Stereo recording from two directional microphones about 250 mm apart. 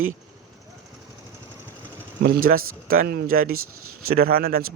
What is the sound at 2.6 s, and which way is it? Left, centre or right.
Speech, right.